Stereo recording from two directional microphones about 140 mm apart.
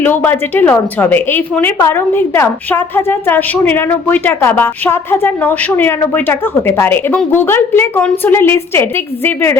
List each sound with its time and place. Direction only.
0.0 s a woman's voice: 15° left (ahead or behind)